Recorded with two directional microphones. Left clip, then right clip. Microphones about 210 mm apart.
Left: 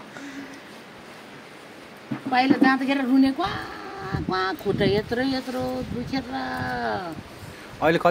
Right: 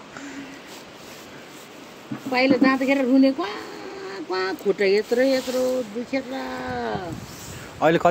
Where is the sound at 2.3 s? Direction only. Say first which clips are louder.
Right 1 dB; 20° left (ahead or behind).